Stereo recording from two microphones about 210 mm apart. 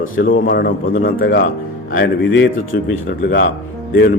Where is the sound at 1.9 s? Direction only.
60° left (ahead or behind).